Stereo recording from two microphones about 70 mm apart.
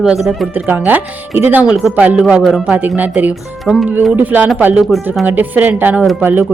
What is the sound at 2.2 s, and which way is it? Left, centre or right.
Speech, centre.